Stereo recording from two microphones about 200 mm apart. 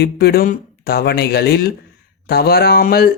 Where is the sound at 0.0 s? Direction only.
50° left (ahead or behind).